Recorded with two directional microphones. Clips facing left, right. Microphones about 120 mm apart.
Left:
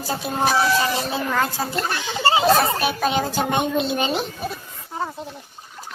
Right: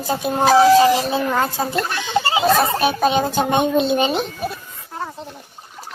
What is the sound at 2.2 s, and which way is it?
Chatter, 30° left (ahead or behind).